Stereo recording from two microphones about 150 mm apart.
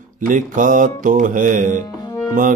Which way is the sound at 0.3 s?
60° right (ahead or behind).